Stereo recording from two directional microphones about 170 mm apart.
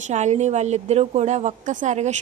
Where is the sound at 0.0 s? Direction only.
45° right (ahead or behind).